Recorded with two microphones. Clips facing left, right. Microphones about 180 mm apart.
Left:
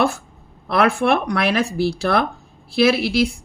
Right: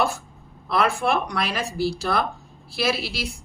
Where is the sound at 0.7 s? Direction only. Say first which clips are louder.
Left 5 dB; 65° left (ahead or behind).